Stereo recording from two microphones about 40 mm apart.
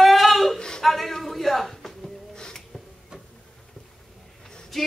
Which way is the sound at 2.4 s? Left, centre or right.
Centre.